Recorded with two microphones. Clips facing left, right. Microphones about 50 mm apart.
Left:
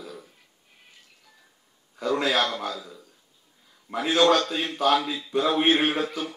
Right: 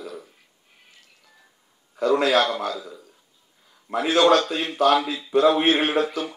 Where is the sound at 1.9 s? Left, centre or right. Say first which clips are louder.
Right 5 dB; centre.